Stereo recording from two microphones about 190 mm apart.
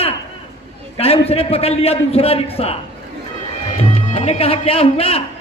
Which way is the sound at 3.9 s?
30° left (ahead or behind).